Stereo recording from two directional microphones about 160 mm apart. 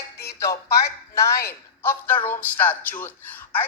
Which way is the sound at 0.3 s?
20° left (ahead or behind).